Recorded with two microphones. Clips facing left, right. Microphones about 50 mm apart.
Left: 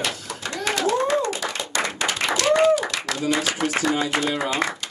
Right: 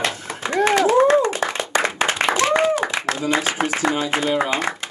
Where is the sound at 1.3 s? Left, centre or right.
Right.